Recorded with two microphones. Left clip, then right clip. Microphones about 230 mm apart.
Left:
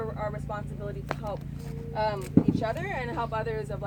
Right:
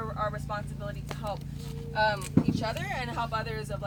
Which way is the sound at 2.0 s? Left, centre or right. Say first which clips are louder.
Even; right.